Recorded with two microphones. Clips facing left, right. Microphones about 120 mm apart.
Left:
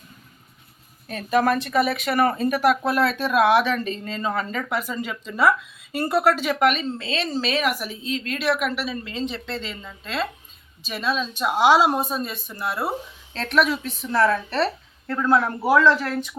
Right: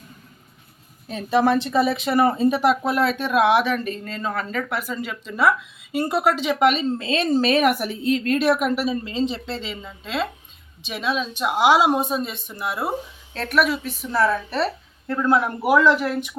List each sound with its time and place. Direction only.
1.3 s speech: 25° right (ahead or behind)
7.0 s speech: 45° right (ahead or behind)
9.6 s speech: 15° right (ahead or behind)